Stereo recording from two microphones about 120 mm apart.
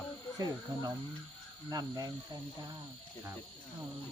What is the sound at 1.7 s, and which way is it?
Speech, 35° right (ahead or behind).